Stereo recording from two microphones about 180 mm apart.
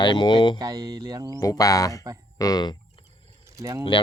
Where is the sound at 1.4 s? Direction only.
20° left (ahead or behind).